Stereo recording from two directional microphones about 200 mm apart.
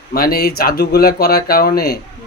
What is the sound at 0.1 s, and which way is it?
Speech, 50° left (ahead or behind).